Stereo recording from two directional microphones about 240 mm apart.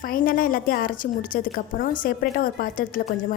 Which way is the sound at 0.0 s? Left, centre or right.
Left.